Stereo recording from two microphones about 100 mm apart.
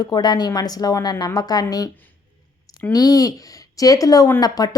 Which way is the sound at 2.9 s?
40° left (ahead or behind).